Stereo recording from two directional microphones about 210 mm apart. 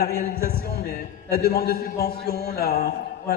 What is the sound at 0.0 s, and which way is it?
A man's voice, 50° left (ahead or behind).